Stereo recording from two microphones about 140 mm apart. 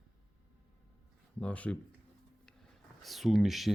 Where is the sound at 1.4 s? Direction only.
10° left (ahead or behind).